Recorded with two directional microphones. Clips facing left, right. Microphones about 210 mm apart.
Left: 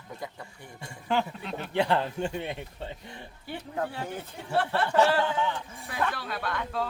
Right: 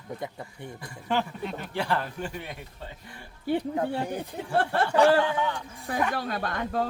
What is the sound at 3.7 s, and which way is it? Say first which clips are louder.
Speech: right 4 dB; 15° right (ahead or behind).